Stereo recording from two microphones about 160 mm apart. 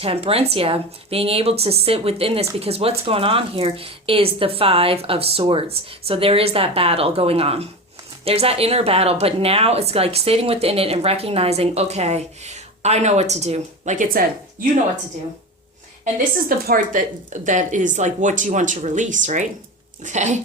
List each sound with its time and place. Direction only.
0.0 s speech: 35° right (ahead or behind); by 14.2 s 55° right (ahead or behind)
16.5 s speech: 60° right (ahead or behind)